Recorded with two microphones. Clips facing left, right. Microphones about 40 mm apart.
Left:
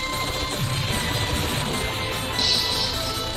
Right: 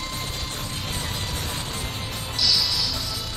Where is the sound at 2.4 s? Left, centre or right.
Left.